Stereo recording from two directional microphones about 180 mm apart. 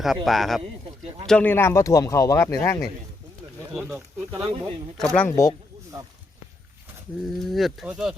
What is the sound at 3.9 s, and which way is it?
Speech, 15° right (ahead or behind).